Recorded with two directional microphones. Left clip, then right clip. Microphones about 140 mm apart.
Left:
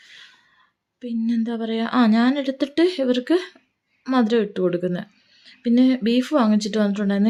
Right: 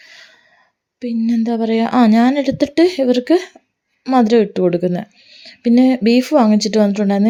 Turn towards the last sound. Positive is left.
turn(degrees=-35)  # may be behind; listen again after turning